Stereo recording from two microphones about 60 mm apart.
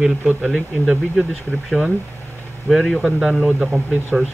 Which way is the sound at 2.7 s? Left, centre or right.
Centre.